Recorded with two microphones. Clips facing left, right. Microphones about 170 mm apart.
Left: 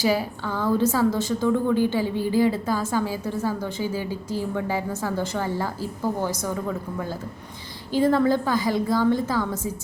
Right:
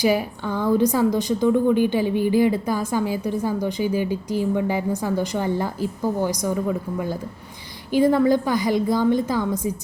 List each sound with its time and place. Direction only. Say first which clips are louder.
0.0 s a woman's voice: right 3 dB; 15° right (ahead or behind)